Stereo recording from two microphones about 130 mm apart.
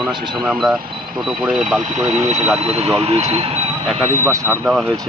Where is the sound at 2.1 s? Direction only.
60° right (ahead or behind).